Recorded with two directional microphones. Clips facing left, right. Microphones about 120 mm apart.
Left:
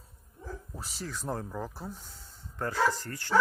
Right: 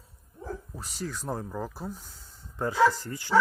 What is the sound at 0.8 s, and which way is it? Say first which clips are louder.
Speech: right 3 dB; centre (ahead or behind).